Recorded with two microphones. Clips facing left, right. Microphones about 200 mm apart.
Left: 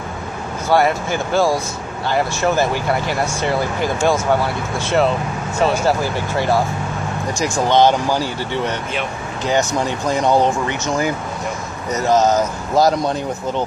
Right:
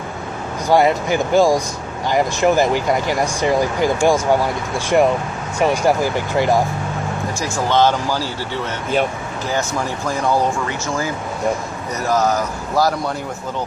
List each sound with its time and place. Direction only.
0.7 s speech: 15° right (ahead or behind)
7.3 s speech: 15° left (ahead or behind)